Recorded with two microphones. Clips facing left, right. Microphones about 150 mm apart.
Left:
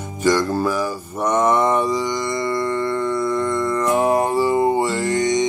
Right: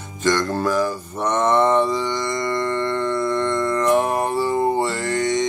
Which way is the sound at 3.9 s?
15° left (ahead or behind).